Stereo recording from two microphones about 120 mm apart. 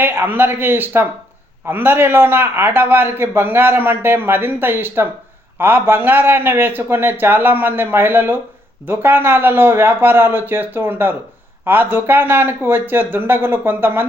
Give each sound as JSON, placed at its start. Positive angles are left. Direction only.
{"t": 0.0, "sound": "a man's voice", "side_deg": -15}